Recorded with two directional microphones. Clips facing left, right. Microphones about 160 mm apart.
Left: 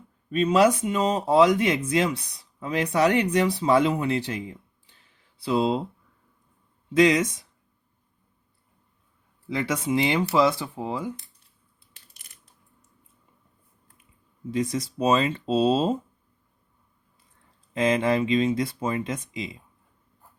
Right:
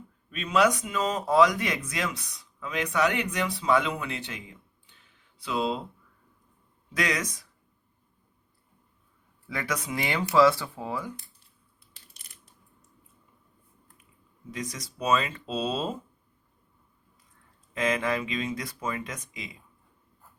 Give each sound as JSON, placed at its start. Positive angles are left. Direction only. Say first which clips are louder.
{"t": 0.3, "sound": "speech", "louder": "left 5 dB", "side_deg": 40}
{"t": 6.9, "sound": "speech", "louder": "left 10 dB", "side_deg": 25}
{"t": 9.5, "sound": "speech", "louder": "left 7 dB", "side_deg": 25}
{"t": 14.5, "sound": "speech", "louder": "left 10 dB", "side_deg": 30}
{"t": 17.7, "sound": "speech", "louder": "left 5 dB", "side_deg": 30}